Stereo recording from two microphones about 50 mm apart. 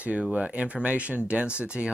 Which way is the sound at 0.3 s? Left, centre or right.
Right.